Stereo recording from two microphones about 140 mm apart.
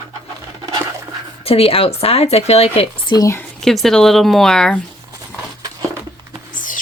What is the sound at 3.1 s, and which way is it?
Speech, 25° left (ahead or behind).